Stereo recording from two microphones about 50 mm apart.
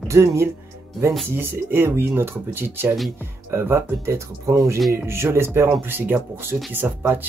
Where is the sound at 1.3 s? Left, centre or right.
Right.